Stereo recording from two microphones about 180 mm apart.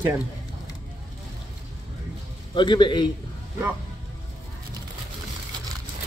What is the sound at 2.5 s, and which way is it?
Speech, 25° left (ahead or behind).